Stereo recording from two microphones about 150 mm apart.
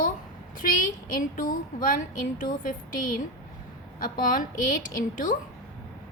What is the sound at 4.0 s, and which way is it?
A woman's voice, 65° left (ahead or behind).